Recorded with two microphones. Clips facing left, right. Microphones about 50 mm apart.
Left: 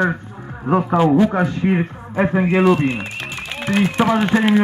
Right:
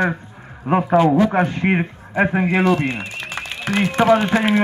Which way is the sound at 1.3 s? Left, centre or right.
Right.